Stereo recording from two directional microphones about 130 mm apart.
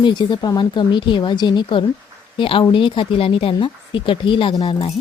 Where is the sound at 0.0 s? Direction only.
35° left (ahead or behind).